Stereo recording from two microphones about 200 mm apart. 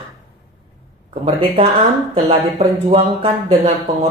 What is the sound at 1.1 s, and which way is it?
Speech, 30° right (ahead or behind).